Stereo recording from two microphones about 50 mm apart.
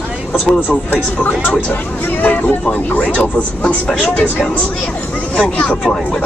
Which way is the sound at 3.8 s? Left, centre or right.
Centre.